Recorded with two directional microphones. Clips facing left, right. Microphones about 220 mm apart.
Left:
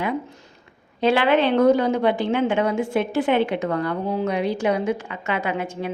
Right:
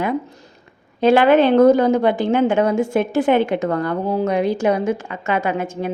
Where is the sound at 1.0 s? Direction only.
45° right (ahead or behind).